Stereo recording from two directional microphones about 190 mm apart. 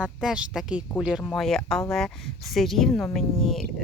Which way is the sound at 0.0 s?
5° right (ahead or behind).